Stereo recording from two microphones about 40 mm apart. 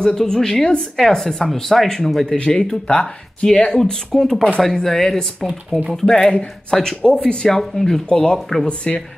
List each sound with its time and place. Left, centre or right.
0.1 s a woman's voice: centre
2.2 s a woman's voice: left
8.4 s a woman's voice: centre
8.6 s speech: left